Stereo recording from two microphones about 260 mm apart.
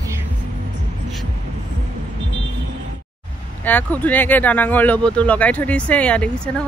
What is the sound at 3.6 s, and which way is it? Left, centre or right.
Speech, centre.